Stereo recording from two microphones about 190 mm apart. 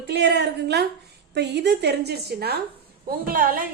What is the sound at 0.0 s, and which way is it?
A woman's voice, 60° right (ahead or behind).